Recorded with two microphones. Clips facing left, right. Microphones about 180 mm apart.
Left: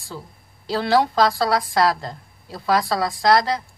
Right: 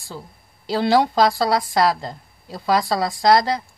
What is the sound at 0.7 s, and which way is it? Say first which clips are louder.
A woman's voice: right 1 dB; 15° right (ahead or behind).